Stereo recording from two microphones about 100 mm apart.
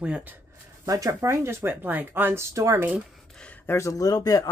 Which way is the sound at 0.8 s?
35° right (ahead or behind).